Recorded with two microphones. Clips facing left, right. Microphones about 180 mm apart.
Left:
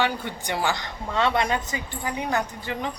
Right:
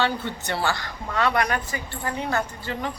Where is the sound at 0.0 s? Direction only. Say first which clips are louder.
Right 1 dB; 15° left (ahead or behind).